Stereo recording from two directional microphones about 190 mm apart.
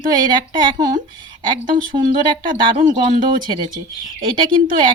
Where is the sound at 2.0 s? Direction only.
25° right (ahead or behind).